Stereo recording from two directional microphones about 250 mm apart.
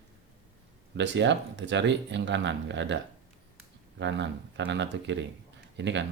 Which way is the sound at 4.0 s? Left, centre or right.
Right.